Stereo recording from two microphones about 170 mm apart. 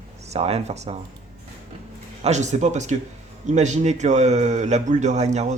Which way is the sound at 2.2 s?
45° right (ahead or behind).